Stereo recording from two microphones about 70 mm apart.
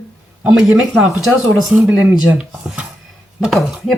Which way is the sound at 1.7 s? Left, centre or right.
Centre.